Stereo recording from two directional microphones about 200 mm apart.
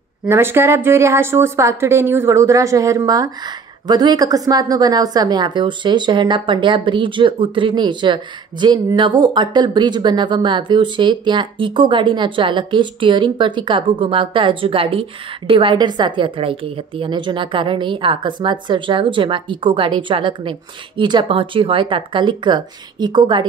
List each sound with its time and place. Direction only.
0.3 s a woman's voice: 10° right (ahead or behind)